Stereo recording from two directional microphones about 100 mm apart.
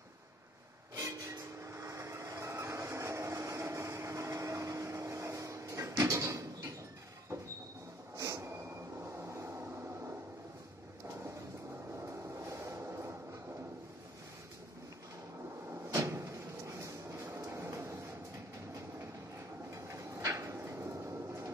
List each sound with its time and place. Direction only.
0.9 s train: 30° right (ahead or behind)
8.2 s train: 30° right (ahead or behind)
9.0 s vehicle: 25° right (ahead or behind)
12.0 s train: 25° right (ahead or behind)
16.1 s a sound: 30° right (ahead or behind)
19.7 s a sound: 30° right (ahead or behind)